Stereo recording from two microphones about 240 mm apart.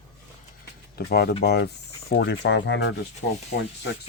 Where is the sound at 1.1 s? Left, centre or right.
Left.